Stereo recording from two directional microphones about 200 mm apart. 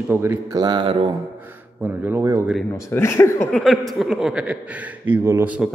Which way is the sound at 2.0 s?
15° right (ahead or behind).